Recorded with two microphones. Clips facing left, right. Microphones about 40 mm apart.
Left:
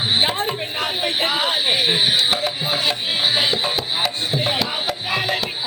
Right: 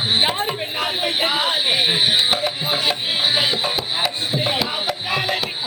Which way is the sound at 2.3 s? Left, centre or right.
Centre.